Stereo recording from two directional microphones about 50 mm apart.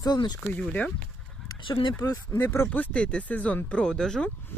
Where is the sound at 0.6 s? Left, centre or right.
Left.